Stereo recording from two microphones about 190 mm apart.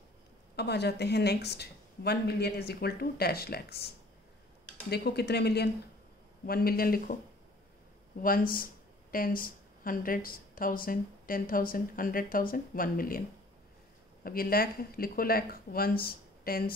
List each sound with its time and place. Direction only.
0.6 s a woman's voice: 60° left (ahead or behind)
8.2 s speech: 50° left (ahead or behind)
14.2 s speech: 50° left (ahead or behind)